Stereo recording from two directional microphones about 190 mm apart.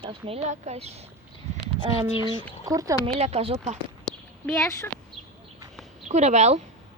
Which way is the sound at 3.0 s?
35° right (ahead or behind).